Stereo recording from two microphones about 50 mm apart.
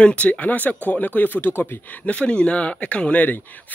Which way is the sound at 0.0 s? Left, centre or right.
Left.